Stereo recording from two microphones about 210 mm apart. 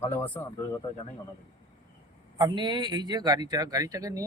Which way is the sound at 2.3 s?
20° right (ahead or behind).